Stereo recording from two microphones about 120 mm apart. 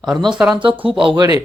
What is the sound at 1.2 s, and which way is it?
Speech, 30° right (ahead or behind).